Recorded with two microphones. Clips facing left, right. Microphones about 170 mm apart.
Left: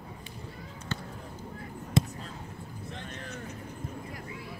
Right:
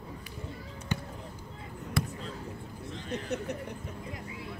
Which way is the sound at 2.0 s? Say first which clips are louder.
Left 5 dB; 20° left (ahead or behind).